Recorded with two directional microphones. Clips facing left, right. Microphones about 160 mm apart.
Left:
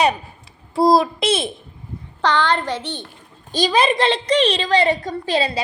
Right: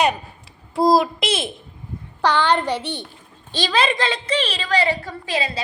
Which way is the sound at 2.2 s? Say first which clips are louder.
Right 1 dB; 15° right (ahead or behind).